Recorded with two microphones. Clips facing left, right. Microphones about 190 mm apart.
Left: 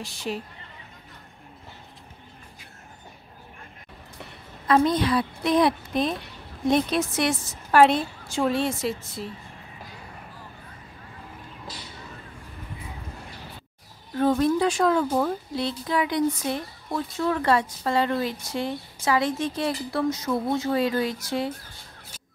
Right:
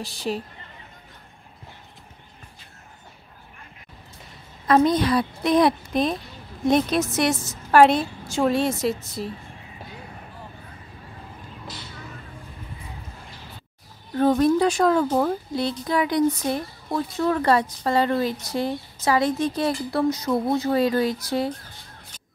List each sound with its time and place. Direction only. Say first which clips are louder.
0.0 s a woman's voice: right 3 dB; 35° right (ahead or behind)
4.6 s a woman's voice: right 2 dB; 40° right (ahead or behind)
14.2 s a woman's voice: right 3 dB; 40° right (ahead or behind)